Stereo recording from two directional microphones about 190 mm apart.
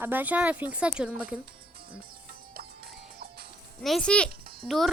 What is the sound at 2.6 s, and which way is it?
Music, 50° right (ahead or behind).